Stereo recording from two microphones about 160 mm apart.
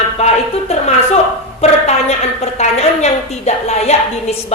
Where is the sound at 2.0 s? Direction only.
40° left (ahead or behind).